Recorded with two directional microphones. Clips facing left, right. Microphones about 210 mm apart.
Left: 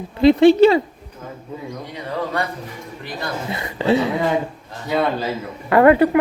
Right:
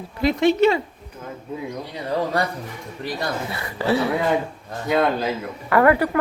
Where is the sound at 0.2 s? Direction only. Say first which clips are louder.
Left 7 dB; 30° left (ahead or behind).